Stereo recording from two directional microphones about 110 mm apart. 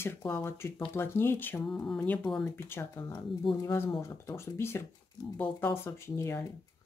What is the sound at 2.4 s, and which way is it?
Speech, 20° left (ahead or behind).